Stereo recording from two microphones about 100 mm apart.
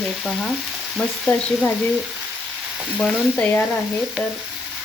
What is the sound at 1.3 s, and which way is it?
Stir, 20° left (ahead or behind).